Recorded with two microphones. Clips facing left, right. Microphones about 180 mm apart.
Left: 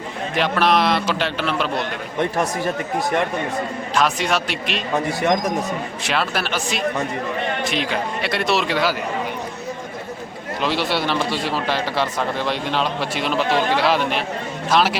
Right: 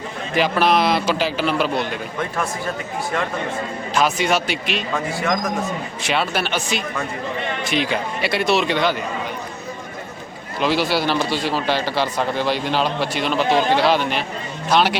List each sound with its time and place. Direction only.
0.3 s speech: centre (ahead or behind)
3.9 s speech: centre (ahead or behind)
4.9 s speech: 20° left (ahead or behind)
6.0 s speech: centre (ahead or behind)
10.6 s speech: centre (ahead or behind)